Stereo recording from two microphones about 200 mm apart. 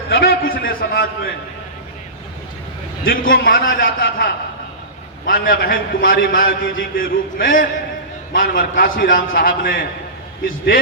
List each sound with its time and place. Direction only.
0.1 s a man's voice: 50° left (ahead or behind)
3.0 s a man's voice: 45° left (ahead or behind)